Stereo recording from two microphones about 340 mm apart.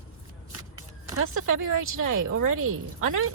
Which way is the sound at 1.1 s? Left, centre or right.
Right.